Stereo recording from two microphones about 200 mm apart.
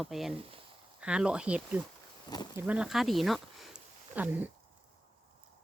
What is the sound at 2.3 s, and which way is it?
Speech, 20° left (ahead or behind).